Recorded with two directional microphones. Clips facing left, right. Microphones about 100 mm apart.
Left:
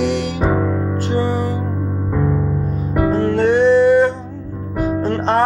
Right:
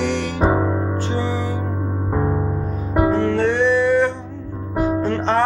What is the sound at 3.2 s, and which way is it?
Music, 45° left (ahead or behind).